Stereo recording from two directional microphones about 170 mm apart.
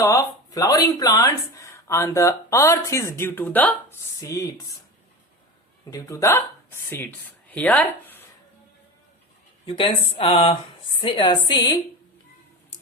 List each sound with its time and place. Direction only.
0.0 s speech: 20° left (ahead or behind)
5.9 s speech: 20° left (ahead or behind)
9.6 s a woman's voice: 30° left (ahead or behind)